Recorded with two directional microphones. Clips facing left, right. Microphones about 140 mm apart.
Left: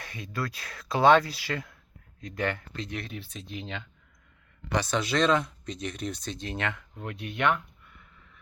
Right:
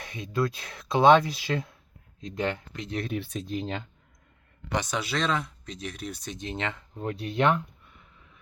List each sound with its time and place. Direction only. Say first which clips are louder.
0.0 s speech: right 6 dB; 20° right (ahead or behind)
3.1 s speech: right 8 dB; 55° right (ahead or behind); by 3.8 s 40° right (ahead or behind)
4.7 s speech: left 1 dB; 20° right (ahead or behind)
4.9 s speech: left 6 dB; 5° right (ahead or behind); by 8.0 s 25° right (ahead or behind)